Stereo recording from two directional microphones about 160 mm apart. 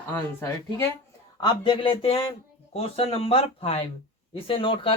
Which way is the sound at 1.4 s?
30° left (ahead or behind).